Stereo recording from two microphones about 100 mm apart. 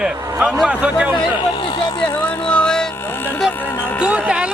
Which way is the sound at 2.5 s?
10° left (ahead or behind).